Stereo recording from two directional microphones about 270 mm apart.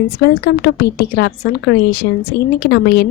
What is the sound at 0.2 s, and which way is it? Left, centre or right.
A woman's voice, left.